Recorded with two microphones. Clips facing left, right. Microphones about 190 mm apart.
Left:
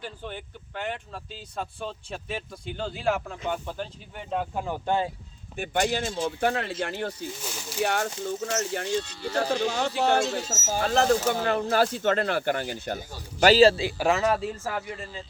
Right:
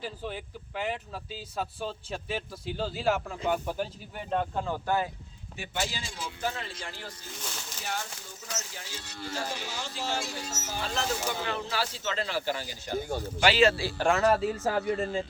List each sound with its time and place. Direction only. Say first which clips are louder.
0.0 s speech: right 1 dB; 5° right (ahead or behind)
4.3 s speech: even; 10° left (ahead or behind)
5.5 s speech: left 9 dB; 55° left (ahead or behind)
13.0 s a man's voice: right 9 dB; 55° right (ahead or behind)
13.4 s a man's voice: left 6 dB; 35° left (ahead or behind)
14.0 s speech: even; 5° left (ahead or behind)
14.7 s speech: right 5 dB; 35° right (ahead or behind)